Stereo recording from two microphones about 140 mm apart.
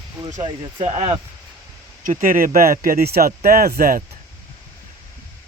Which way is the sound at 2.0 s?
80° right.